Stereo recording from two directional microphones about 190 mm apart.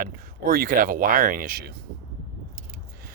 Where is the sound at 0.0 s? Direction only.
50° right (ahead or behind).